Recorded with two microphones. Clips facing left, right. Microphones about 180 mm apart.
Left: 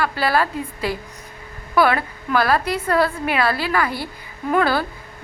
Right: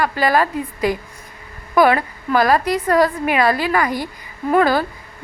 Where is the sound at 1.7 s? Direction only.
15° right (ahead or behind).